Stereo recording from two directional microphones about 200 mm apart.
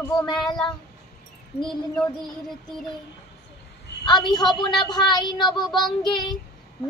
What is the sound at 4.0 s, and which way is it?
Child singing, 20° left (ahead or behind).